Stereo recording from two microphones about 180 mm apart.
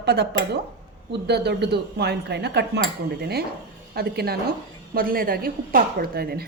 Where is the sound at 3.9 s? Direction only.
60° right (ahead or behind).